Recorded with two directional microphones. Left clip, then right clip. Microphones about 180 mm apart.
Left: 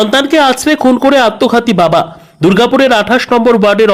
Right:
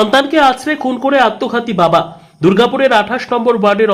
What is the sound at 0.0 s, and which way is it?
Speech, 20° left (ahead or behind).